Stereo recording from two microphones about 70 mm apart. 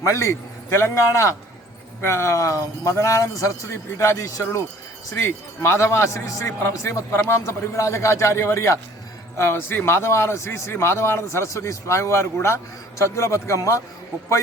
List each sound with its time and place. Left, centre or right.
0.0 s a man's voice: left
5.5 s a man's voice: left
9.4 s a man's voice: left